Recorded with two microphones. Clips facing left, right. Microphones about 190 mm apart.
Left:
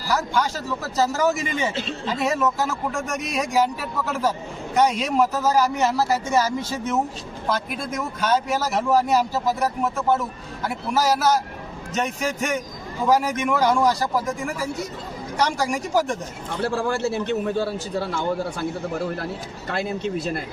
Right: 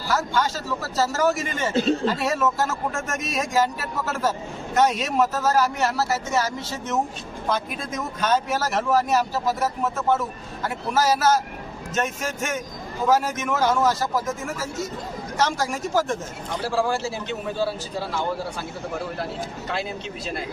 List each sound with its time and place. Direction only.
0.3 s a man's voice: 15° left (ahead or behind)
16.6 s a man's voice: 60° left (ahead or behind)
19.6 s speech: 50° left (ahead or behind)